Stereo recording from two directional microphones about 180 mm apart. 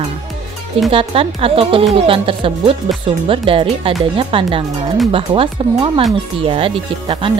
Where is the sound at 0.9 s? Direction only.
30° right (ahead or behind).